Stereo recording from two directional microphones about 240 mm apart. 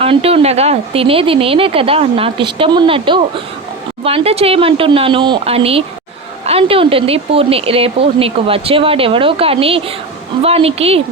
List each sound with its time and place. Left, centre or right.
0.0 s speech: right